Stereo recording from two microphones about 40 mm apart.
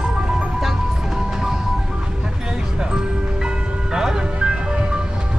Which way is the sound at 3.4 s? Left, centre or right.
Centre.